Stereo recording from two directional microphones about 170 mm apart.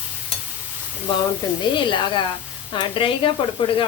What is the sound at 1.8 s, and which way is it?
Speech, 30° left (ahead or behind).